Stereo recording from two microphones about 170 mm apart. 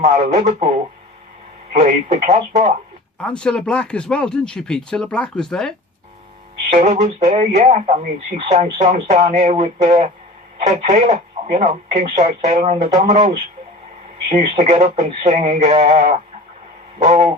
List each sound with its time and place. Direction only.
0.0 s speech: 45° right (ahead or behind)
1.7 s speech: 45° right (ahead or behind)
3.2 s speech: 5° left (ahead or behind)
6.7 s speech: 40° right (ahead or behind)
14.5 s speech: 45° right (ahead or behind)